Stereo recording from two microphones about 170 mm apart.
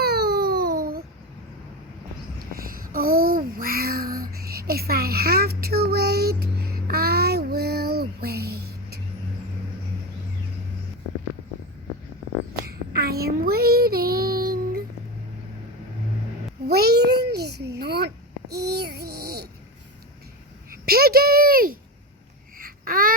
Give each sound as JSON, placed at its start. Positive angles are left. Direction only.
{"t": 0.0, "sound": "baby cry", "side_deg": -70}
{"t": 2.5, "sound": "child singing", "side_deg": -60}
{"t": 12.6, "sound": "child singing", "side_deg": -65}
{"t": 16.6, "sound": "a sound", "side_deg": -65}
{"t": 20.7, "sound": "a sound", "side_deg": -65}
{"t": 22.5, "sound": "babbling", "side_deg": -55}